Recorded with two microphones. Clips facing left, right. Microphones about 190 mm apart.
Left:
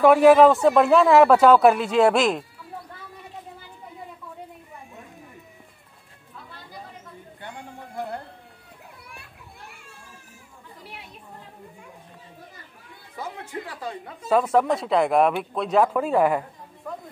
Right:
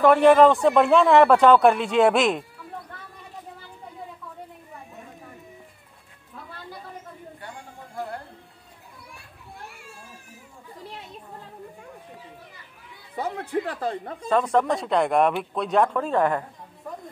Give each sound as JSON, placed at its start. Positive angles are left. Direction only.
{"t": 0.0, "sound": "a man's voice", "side_deg": 5}
{"t": 13.1, "sound": "speech", "side_deg": -60}
{"t": 14.2, "sound": "a man's voice", "side_deg": 5}